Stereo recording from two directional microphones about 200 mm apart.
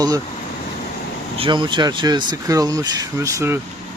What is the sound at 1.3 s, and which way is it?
Speech, 25° right (ahead or behind).